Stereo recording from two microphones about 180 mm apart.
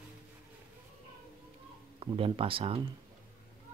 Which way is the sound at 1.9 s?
30° right (ahead or behind).